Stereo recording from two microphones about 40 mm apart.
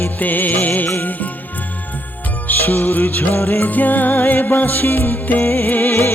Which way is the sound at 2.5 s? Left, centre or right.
Left.